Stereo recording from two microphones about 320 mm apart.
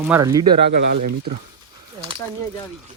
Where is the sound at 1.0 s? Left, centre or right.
Right.